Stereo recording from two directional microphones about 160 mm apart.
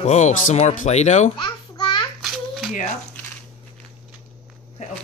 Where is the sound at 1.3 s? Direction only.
25° left (ahead or behind).